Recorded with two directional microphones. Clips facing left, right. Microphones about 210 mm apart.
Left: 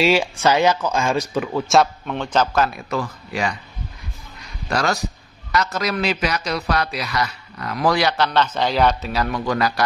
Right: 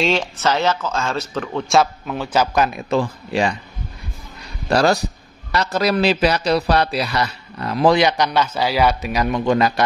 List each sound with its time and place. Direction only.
0.0 s speech: 10° left (ahead or behind); by 3.5 s 30° right (ahead or behind)
4.6 s a man's voice: 35° right (ahead or behind)